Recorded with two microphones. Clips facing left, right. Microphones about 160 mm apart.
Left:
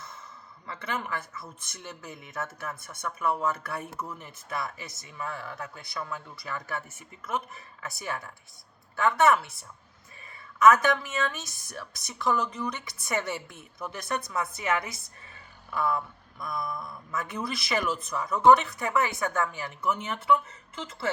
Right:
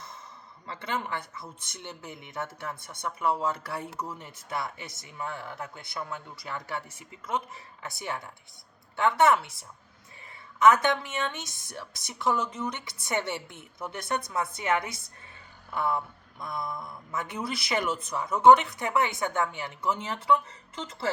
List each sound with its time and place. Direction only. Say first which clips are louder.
0.7 s a woman's voice: right 1 dB; 30° right (ahead or behind)
10.6 s a woman's voice: left 1 dB; 25° right (ahead or behind)